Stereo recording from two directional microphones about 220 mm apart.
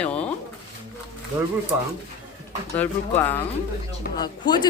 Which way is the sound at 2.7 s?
10° left (ahead or behind).